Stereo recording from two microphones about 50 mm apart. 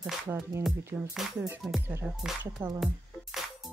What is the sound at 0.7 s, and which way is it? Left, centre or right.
Speech, right.